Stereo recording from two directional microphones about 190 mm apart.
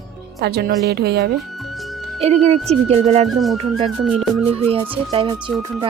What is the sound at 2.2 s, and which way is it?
Speech, 35° right (ahead or behind).